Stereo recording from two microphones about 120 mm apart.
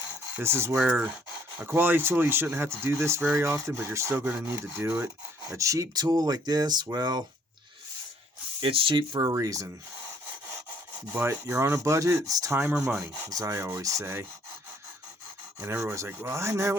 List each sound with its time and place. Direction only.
0.3 s speech: 20° right (ahead or behind)
0.9 s rub: 15° right (ahead or behind)
1.5 s speech: 15° right (ahead or behind)
4.9 s rub: 10° right (ahead or behind)
5.5 s speech: 25° right (ahead or behind)
8.6 s speech: 45° right (ahead or behind); by 9.6 s 30° right (ahead or behind)
11.1 s speech: 20° right (ahead or behind)
12.6 s rub: 10° right (ahead or behind)
13.2 s speech: 25° right (ahead or behind)
15.6 s speech: 20° right (ahead or behind)